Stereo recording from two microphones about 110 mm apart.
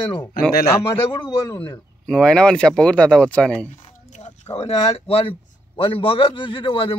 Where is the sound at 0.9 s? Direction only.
50° left (ahead or behind).